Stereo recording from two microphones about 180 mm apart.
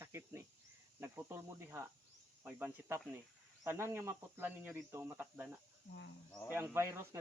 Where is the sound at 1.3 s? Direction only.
15° right (ahead or behind).